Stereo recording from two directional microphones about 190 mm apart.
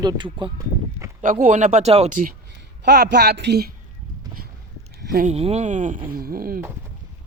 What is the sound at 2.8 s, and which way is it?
Speech, 65° right (ahead or behind).